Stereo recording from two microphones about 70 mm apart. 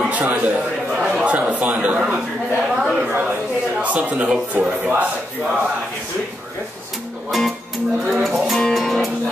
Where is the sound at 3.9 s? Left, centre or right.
Centre.